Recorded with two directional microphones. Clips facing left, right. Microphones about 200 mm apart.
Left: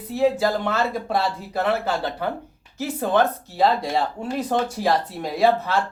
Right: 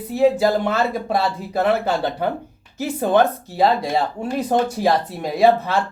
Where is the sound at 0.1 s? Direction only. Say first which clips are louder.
Right 4 dB; 15° right (ahead or behind).